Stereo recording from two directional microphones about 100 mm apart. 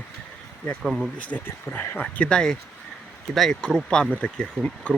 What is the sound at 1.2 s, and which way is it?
Speech, 15° left (ahead or behind).